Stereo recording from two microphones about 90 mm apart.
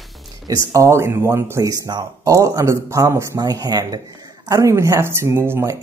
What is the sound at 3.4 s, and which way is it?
Speech, 45° right (ahead or behind).